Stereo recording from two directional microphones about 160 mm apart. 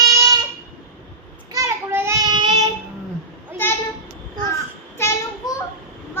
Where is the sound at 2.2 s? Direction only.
25° right (ahead or behind).